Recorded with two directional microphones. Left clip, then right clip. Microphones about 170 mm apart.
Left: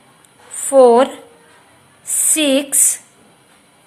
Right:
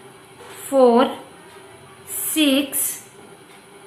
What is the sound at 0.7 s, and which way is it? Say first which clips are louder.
Speech: left 5 dB; 45° left (ahead or behind).